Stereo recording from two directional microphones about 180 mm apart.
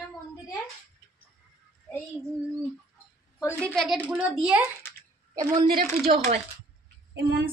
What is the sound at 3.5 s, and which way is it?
Speech, 5° left (ahead or behind).